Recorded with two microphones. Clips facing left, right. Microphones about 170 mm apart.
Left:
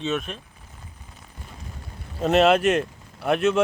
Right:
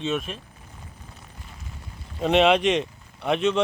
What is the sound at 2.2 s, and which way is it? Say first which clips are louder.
Speech: left 1 dB; centre (ahead or behind).